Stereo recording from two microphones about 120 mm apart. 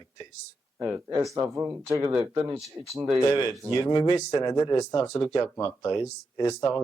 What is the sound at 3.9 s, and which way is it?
Speech, 35° left (ahead or behind).